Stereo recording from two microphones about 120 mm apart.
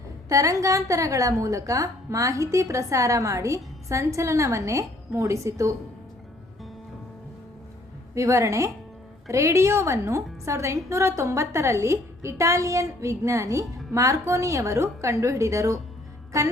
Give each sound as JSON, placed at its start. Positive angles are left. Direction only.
{"t": 0.3, "sound": "a woman's voice", "side_deg": -30}
{"t": 8.1, "sound": "a woman's voice", "side_deg": -25}